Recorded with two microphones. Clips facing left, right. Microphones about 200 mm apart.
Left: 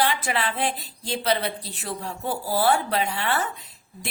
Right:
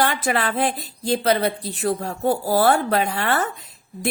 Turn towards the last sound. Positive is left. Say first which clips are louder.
# right 9 dB
turn(degrees=-50)  # may be behind; listen again after turning